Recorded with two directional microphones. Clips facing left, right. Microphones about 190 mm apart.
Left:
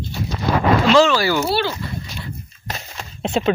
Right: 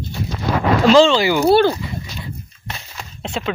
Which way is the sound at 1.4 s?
45° right (ahead or behind).